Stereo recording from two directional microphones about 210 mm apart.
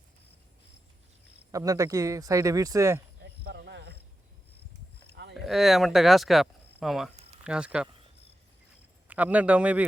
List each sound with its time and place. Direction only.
1.5 s speech: 15° right (ahead or behind)
3.4 s a sound: 55° right (ahead or behind)
5.3 s speech: centre (ahead or behind)
9.0 s a man's voice: 5° right (ahead or behind)